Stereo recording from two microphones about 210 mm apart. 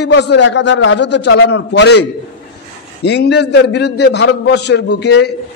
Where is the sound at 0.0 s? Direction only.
55° left (ahead or behind).